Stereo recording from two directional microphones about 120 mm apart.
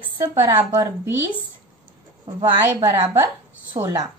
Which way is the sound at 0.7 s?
20° right (ahead or behind).